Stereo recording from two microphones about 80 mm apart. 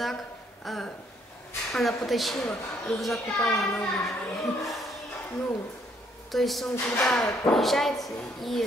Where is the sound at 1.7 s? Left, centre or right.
Centre.